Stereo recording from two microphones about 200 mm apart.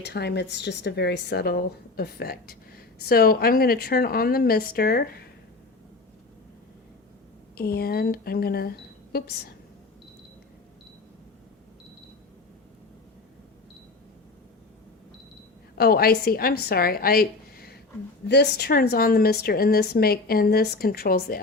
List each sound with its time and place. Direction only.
0.0 s speech: 55° left (ahead or behind)
7.5 s speech: 50° left (ahead or behind)
15.8 s speech: 50° left (ahead or behind)